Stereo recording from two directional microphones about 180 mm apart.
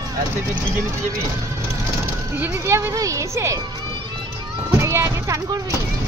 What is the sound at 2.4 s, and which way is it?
Speech, 15° right (ahead or behind).